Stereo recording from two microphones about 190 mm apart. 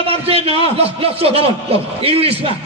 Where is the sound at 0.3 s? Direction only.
30° right (ahead or behind).